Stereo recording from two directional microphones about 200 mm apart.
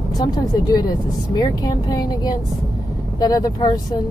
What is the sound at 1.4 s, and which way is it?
Speech, 20° left (ahead or behind).